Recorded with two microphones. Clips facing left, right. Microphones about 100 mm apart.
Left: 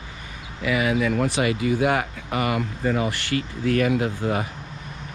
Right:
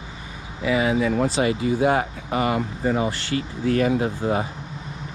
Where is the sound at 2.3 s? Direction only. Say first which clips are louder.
Right 2 dB; 25° right (ahead or behind).